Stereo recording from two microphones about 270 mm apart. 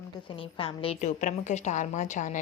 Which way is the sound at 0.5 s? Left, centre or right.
Left.